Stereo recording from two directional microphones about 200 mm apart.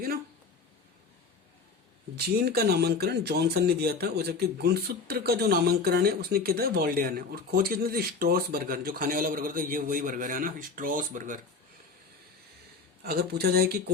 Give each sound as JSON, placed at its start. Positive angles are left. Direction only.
{"t": 2.1, "sound": "speech", "side_deg": -55}
{"t": 13.0, "sound": "speech", "side_deg": -55}